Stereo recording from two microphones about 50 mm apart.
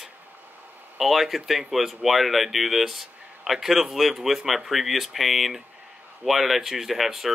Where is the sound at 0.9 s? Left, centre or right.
Centre.